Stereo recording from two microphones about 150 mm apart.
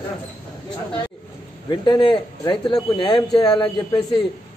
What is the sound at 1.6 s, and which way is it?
A man's voice, 30° left (ahead or behind).